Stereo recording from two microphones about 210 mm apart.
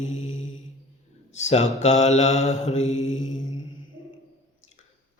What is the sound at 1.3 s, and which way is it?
Mantra, 30° left (ahead or behind).